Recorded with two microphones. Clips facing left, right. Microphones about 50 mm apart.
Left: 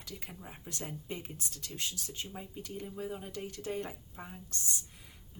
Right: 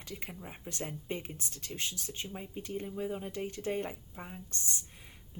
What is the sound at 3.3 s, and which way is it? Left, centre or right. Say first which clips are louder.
Speech: right 3 dB; right.